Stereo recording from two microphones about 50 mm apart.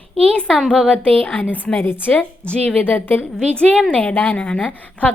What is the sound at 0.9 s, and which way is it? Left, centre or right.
Speech, left.